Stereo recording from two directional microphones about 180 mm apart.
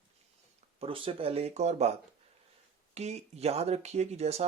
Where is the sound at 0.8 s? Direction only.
30° right (ahead or behind).